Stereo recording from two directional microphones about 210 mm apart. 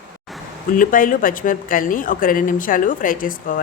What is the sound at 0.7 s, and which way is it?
Speech, 40° left (ahead or behind).